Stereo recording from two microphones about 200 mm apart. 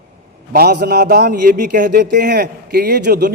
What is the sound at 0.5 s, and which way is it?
A man's voice, 50° right (ahead or behind).